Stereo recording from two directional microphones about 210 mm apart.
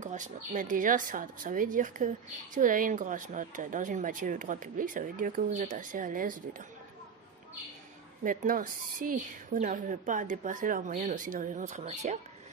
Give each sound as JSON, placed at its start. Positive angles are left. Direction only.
{"t": 0.0, "sound": "speech", "side_deg": -35}
{"t": 8.2, "sound": "speech", "side_deg": -40}